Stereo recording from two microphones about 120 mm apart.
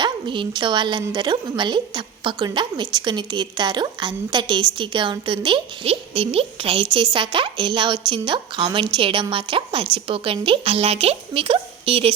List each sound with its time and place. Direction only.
0.0 s a woman's voice: 40° right (ahead or behind)